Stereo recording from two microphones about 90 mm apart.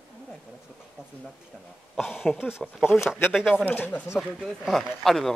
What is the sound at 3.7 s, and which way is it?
Speech, 20° left (ahead or behind).